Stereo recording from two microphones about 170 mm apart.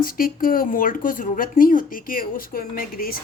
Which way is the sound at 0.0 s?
55° left (ahead or behind).